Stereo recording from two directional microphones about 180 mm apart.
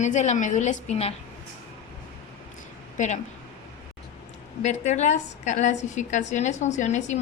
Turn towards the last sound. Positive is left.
turn(degrees=40)  # may be behind; listen again after turning